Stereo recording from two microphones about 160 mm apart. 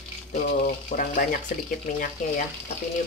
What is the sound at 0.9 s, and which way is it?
Speech, 60° left (ahead or behind).